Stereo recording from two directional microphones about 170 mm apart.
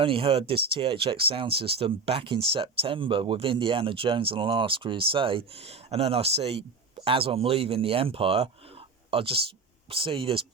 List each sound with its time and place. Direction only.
0.0 s speech: 30° right (ahead or behind)